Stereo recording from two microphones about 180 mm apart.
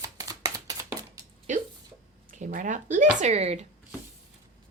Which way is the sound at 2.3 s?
50° right (ahead or behind).